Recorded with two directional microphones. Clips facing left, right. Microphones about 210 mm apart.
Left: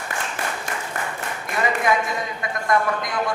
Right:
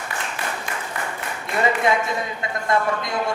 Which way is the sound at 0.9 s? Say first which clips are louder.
Even; 45° left (ahead or behind).